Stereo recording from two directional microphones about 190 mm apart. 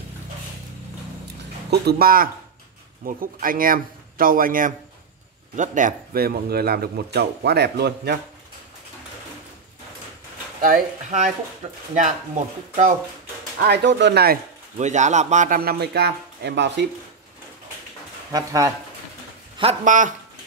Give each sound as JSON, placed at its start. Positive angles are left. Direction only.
{"t": 1.7, "sound": "a man's voice", "side_deg": -55}
{"t": 10.6, "sound": "speech", "side_deg": -45}
{"t": 13.6, "sound": "speech", "side_deg": -60}
{"t": 14.8, "sound": "a man's voice", "side_deg": -40}
{"t": 18.3, "sound": "speech", "side_deg": -15}
{"t": 19.6, "sound": "a man's voice", "side_deg": -35}